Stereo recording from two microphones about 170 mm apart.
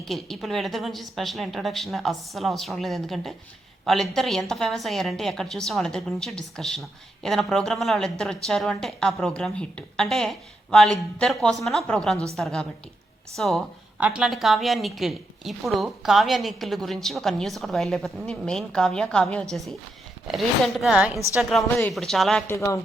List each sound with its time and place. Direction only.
0.0 s a woman's voice: centre (ahead or behind)
22.5 s speech: 20° left (ahead or behind)